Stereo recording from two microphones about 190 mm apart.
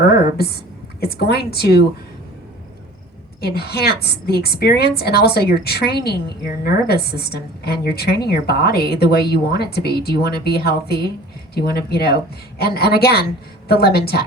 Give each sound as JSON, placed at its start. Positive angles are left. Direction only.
{"t": 0.0, "sound": "a sound", "side_deg": 55}
{"t": 0.9, "sound": "a woman's voice", "side_deg": 55}
{"t": 3.4, "sound": "a woman's voice", "side_deg": 55}